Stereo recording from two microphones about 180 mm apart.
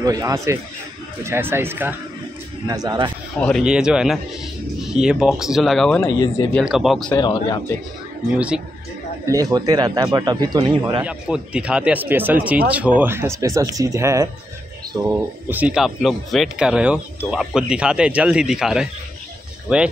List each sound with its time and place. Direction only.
0.0 s speech: 20° right (ahead or behind)
3.3 s speech: 5° left (ahead or behind)
3.6 s speech: 5° right (ahead or behind)
5.9 s speech: 15° left (ahead or behind)
6.6 s speech: centre (ahead or behind)
7.1 s speech: 25° left (ahead or behind)
9.2 s speech: 20° right (ahead or behind)
11.1 s speech: 5° right (ahead or behind)